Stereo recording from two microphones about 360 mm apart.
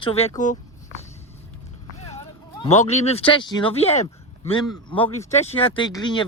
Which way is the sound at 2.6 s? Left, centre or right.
Centre.